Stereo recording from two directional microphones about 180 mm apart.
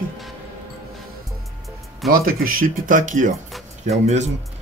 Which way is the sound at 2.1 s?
50° right (ahead or behind).